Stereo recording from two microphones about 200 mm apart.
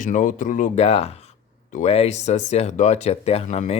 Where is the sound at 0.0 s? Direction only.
40° left (ahead or behind).